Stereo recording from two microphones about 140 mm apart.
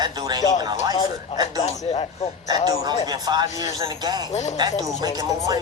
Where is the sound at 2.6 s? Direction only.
30° right (ahead or behind).